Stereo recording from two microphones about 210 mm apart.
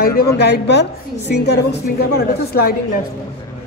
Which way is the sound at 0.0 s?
50° left (ahead or behind).